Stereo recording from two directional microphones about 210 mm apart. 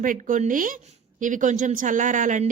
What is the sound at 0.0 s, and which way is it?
Speech, 40° right (ahead or behind).